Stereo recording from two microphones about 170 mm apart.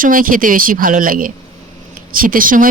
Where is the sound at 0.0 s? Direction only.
55° right (ahead or behind).